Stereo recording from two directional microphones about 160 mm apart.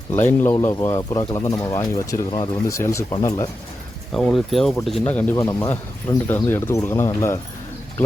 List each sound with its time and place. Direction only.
0.1 s speech: 15° left (ahead or behind)
4.1 s speech: 5° left (ahead or behind)